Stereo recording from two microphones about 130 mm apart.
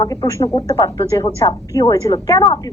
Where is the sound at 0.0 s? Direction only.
25° left (ahead or behind).